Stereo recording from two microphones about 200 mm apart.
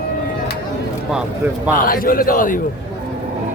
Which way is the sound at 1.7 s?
45° left (ahead or behind).